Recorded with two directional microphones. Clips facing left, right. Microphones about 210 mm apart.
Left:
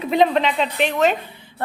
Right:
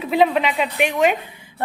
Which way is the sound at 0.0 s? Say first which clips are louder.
Even; 5° right (ahead or behind).